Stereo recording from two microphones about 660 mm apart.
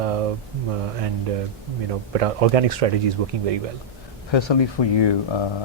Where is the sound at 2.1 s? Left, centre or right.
Right.